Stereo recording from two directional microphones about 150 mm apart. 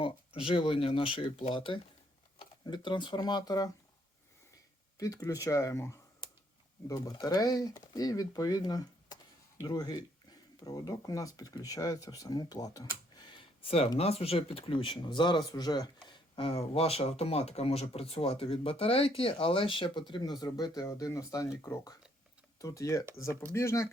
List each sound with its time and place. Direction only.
0.0 s speech: 35° left (ahead or behind)
4.9 s speech: 20° left (ahead or behind)
13.1 s a sound: 30° left (ahead or behind)
14.0 s speech: 40° left (ahead or behind); by 23.9 s 20° left (ahead or behind)